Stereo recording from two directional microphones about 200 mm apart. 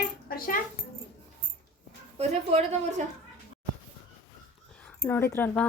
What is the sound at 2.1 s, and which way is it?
Speech, 35° right (ahead or behind).